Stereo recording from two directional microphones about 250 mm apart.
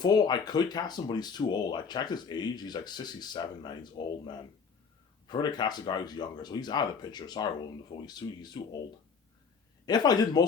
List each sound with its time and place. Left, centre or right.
0.0 s speech: centre
5.3 s speech: centre
9.8 s speech: centre